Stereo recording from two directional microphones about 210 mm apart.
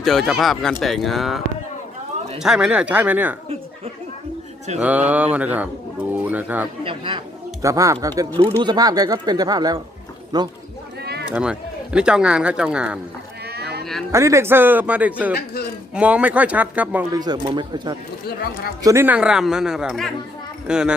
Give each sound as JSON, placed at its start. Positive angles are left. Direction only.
{"t": 0.0, "sound": "speech", "side_deg": 0}
{"t": 2.4, "sound": "speech", "side_deg": -5}
{"t": 4.8, "sound": "speech", "side_deg": -5}
{"t": 6.8, "sound": "speech", "side_deg": -25}
{"t": 11.0, "sound": "a sound", "side_deg": -50}
{"t": 11.3, "sound": "speech", "side_deg": -5}
{"t": 13.5, "sound": "sheep", "side_deg": -50}
{"t": 14.1, "sound": "speech", "side_deg": -15}
{"t": 17.2, "sound": "speech", "side_deg": -20}
{"t": 18.3, "sound": "speech", "side_deg": 45}
{"t": 18.8, "sound": "speech", "side_deg": -15}